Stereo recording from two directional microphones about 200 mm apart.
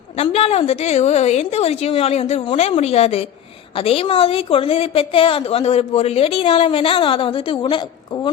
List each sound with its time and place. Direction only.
0.2 s a woman's voice: 30° left (ahead or behind)